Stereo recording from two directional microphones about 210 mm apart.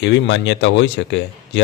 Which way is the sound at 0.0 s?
60° left (ahead or behind).